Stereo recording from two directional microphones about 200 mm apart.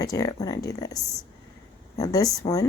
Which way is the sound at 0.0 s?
15° left (ahead or behind).